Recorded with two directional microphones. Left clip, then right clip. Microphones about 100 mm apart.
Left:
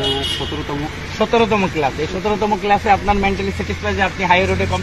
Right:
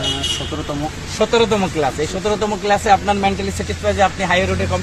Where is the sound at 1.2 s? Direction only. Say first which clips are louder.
Even; 25° right (ahead or behind).